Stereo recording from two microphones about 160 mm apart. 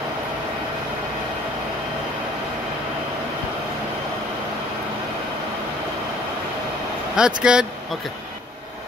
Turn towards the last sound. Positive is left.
turn(degrees=-5)  # may be behind; listen again after turning